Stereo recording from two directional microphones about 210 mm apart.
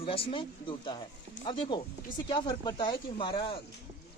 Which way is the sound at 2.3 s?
20° left (ahead or behind).